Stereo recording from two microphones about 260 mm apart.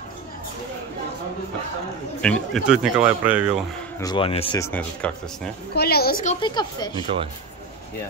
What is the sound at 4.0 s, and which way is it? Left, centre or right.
Speech, centre.